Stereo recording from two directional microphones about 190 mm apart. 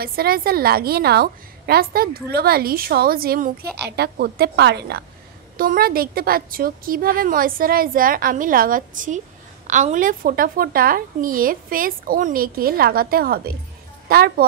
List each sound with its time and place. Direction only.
0.0 s a woman's voice: 50° right (ahead or behind)
3.9 s a woman's voice: 60° right (ahead or behind)